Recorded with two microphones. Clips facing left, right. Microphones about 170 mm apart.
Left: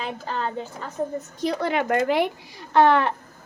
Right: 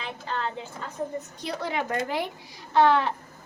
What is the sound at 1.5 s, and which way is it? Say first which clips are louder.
Speech: left 7 dB; 65° left (ahead or behind).